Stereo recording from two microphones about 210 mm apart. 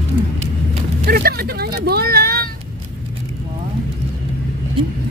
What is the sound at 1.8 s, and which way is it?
Vehicle, 45° right (ahead or behind).